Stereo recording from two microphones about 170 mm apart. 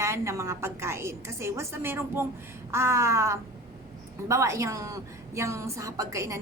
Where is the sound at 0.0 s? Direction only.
15° right (ahead or behind).